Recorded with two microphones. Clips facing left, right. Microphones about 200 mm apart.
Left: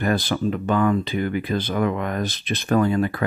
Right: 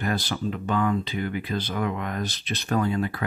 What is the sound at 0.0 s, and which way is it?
Speech, 55° left (ahead or behind).